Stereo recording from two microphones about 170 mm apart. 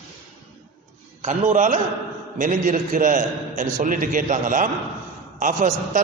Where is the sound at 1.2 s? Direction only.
45° right (ahead or behind).